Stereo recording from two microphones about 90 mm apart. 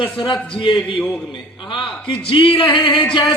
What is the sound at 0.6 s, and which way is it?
Speech, 75° left (ahead or behind).